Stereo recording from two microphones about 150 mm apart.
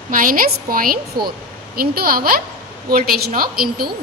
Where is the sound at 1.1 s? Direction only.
30° right (ahead or behind).